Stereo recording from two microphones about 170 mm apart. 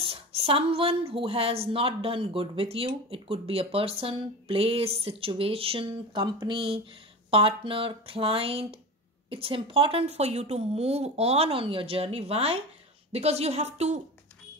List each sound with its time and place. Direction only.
0.0 s a woman's voice: 35° right (ahead or behind)